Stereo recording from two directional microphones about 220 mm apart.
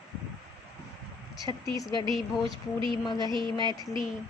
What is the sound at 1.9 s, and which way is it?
Speech, 20° right (ahead or behind).